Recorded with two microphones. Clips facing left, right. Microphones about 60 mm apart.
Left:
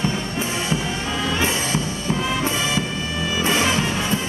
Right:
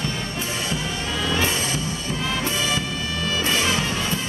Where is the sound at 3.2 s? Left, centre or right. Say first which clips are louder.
Left 3 dB; centre.